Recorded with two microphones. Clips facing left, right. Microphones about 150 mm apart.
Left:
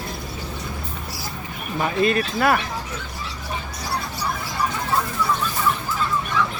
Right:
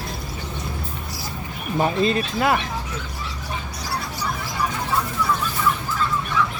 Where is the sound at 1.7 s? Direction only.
30° right (ahead or behind).